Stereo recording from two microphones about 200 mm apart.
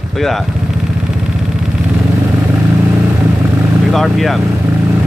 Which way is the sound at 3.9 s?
Centre (ahead or behind).